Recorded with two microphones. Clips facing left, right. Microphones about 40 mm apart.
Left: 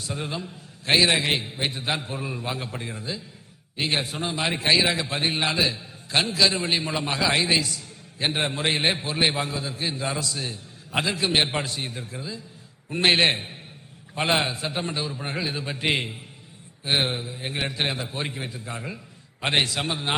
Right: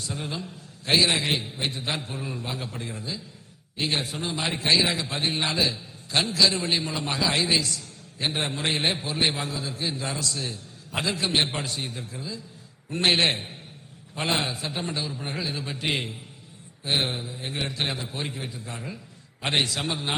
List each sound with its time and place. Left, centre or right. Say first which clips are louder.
0.1 s a man's voice: left 3 dB; centre
0.9 s a man's voice: left 2 dB; left
11.7 s a man's voice: left 1 dB; centre
12.1 s a man's voice: left 1 dB; centre